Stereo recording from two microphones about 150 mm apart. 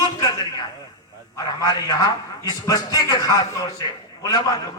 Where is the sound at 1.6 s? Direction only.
25° left (ahead or behind).